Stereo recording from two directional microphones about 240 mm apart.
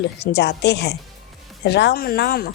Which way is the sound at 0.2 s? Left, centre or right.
Left.